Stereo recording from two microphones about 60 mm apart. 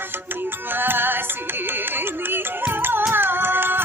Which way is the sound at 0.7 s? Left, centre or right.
Right.